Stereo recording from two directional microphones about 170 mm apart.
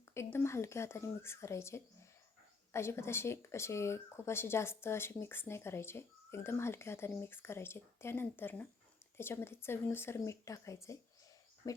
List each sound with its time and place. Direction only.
0.1 s speech: 15° left (ahead or behind)
11.6 s cricket: 20° left (ahead or behind)